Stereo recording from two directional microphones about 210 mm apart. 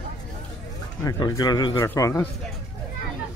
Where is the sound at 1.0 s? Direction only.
15° left (ahead or behind).